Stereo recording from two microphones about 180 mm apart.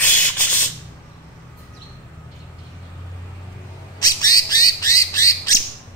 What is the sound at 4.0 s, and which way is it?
Bird, 20° left (ahead or behind).